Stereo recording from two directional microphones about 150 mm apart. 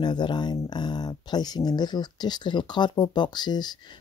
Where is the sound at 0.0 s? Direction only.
30° left (ahead or behind).